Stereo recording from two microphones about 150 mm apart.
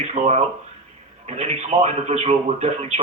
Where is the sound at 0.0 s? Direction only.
45° right (ahead or behind).